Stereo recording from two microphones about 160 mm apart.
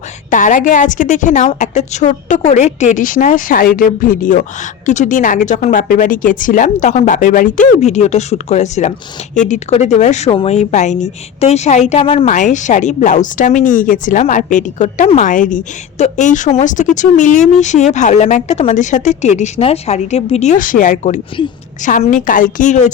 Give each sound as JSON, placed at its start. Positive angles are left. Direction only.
{"t": 0.3, "sound": "a woman's voice", "side_deg": 50}
{"t": 12.3, "sound": "speech", "side_deg": 50}